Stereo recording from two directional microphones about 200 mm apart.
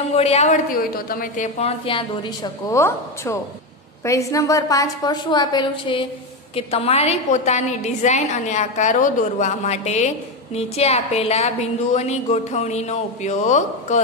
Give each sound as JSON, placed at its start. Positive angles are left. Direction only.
{"t": 0.1, "sound": "a woman's voice", "side_deg": 30}
{"t": 0.7, "sound": "a woman's voice", "side_deg": 45}